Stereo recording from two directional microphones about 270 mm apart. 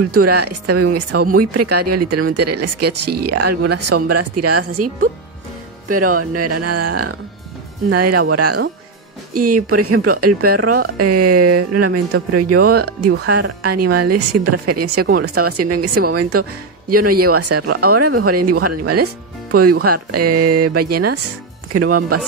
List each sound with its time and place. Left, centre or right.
0.1 s speech: right
6.1 s speech: right
9.3 s speech: right
9.7 s speech: right